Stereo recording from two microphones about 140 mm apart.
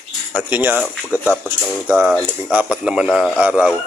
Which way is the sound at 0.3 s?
10° right (ahead or behind).